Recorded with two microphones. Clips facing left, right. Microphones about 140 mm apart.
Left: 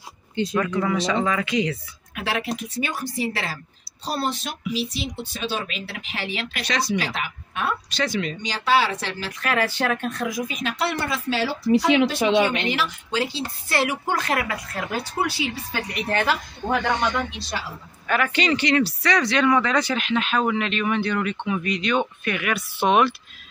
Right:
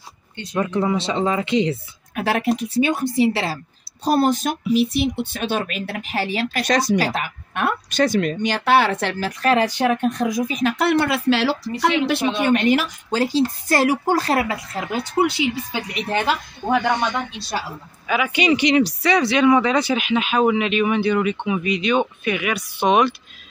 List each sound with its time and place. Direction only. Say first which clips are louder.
0.5 s a woman's voice: right 4 dB; 25° right (ahead or behind)
2.1 s speech: right 6 dB; 45° right (ahead or behind)
2.8 s a woman's voice: right 10 dB; 25° right (ahead or behind)
4.0 s speech: right 9 dB; 50° right (ahead or behind)
7.5 s a sound: right 4 dB; 60° right (ahead or behind)
8.0 s speech: right 9 dB; 45° right (ahead or behind)
9.4 s a woman's voice: right 6 dB; 30° right (ahead or behind)
9.7 s speech: right 5 dB; 15° right (ahead or behind)
10.5 s speech: right 7 dB; 50° right (ahead or behind); by 11.7 s 75° right (ahead or behind)
12.4 s speech: right 7 dB; 45° right (ahead or behind)
14.9 s a woman's voice: right 7 dB; 20° right (ahead or behind); by 23.1 s centre (ahead or behind)